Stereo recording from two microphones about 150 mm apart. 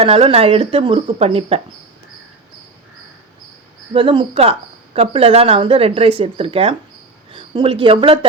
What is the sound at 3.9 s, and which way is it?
Speech, 35° right (ahead or behind).